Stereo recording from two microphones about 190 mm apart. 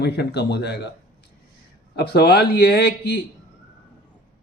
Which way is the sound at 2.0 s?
55° left (ahead or behind).